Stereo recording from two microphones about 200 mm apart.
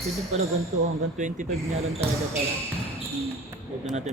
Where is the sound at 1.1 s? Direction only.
40° right (ahead or behind).